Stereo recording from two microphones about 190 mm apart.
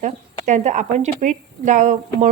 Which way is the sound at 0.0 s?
40° right (ahead or behind).